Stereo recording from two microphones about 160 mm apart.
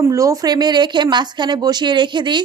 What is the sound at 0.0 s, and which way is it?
Speech, 20° right (ahead or behind).